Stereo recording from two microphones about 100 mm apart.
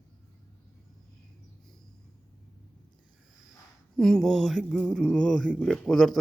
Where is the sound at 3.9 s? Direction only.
5° left (ahead or behind).